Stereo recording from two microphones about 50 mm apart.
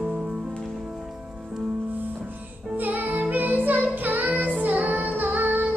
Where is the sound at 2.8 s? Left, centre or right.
Right.